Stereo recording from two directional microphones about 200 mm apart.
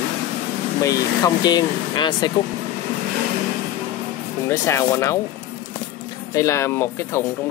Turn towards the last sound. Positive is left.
turn(degrees=15)  # may be behind; listen again after turning